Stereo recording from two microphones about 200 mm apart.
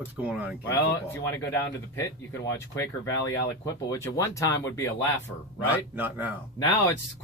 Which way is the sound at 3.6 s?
15° left (ahead or behind).